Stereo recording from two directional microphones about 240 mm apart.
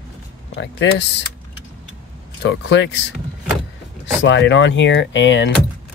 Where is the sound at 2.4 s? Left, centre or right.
Left.